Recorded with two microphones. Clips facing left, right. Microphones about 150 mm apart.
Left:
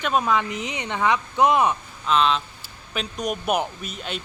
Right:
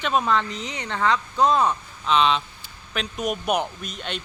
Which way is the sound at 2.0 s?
Centre (ahead or behind).